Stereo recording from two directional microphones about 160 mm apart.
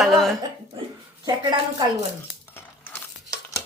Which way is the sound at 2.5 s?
15° left (ahead or behind).